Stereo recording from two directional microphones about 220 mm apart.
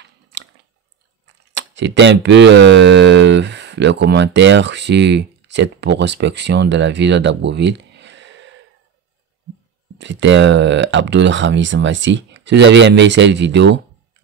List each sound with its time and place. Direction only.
0.0 s chewing: 55° right (ahead or behind)
1.5 s speech: 55° right (ahead or behind)
9.9 s speech: 55° right (ahead or behind)